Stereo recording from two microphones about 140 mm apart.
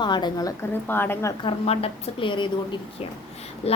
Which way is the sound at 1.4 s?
45° left (ahead or behind).